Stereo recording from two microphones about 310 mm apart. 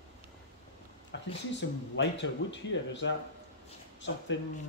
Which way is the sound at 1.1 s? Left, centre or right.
Left.